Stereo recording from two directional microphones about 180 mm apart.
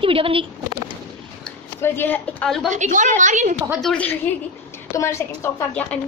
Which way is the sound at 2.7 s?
45° right (ahead or behind).